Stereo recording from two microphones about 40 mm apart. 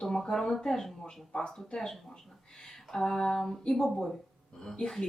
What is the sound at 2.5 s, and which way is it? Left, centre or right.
Speech, centre.